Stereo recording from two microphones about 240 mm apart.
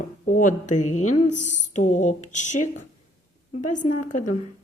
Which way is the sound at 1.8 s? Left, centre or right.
Left.